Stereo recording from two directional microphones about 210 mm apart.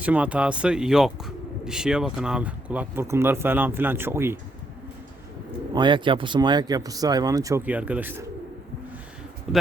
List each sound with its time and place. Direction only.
0.0 s speech: 5° right (ahead or behind)
5.7 s speech: 20° right (ahead or behind)
9.5 s a man's voice: centre (ahead or behind)